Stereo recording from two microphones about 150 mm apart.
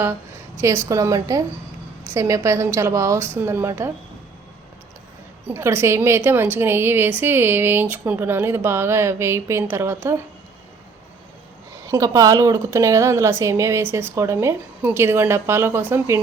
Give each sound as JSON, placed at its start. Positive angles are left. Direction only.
{"t": 0.6, "sound": "a woman's voice", "side_deg": -20}
{"t": 5.5, "sound": "a woman's voice", "side_deg": -15}
{"t": 11.9, "sound": "a woman's voice", "side_deg": -20}